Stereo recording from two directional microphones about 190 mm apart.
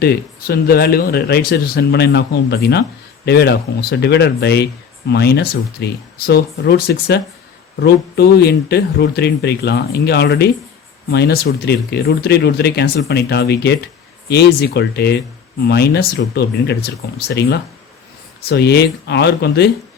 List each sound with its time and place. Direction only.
0.0 s speech: 55° left (ahead or behind)